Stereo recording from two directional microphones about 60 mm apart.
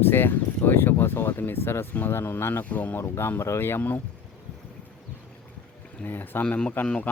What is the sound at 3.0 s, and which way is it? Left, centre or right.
Speech, left.